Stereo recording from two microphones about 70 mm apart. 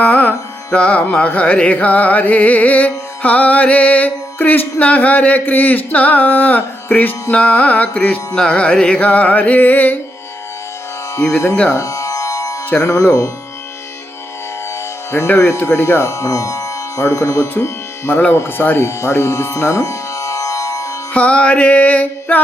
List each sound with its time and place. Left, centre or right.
0.0 s music: left
11.2 s music: left
11.7 s music: left
12.8 s speech: left
15.4 s speech: left
16.0 s speech: left
17.5 s speech: left
18.9 s music: left
21.1 s music: centre